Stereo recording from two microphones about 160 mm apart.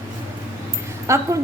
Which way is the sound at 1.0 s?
20° right (ahead or behind).